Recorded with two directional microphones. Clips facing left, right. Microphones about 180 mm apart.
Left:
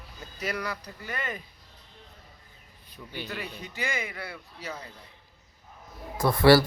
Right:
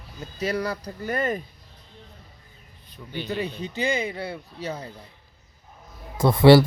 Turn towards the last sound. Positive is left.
turn(degrees=-20)  # may be behind; listen again after turning